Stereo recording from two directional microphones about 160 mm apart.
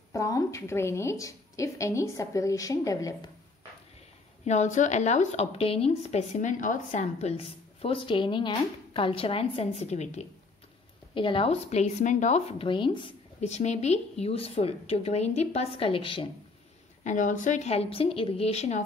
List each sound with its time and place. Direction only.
0.1 s a woman's voice: 20° left (ahead or behind)
4.5 s speech: 50° left (ahead or behind)
11.1 s a woman's voice: 35° left (ahead or behind)
13.4 s a woman's voice: 45° left (ahead or behind)
17.0 s a woman's voice: 50° left (ahead or behind)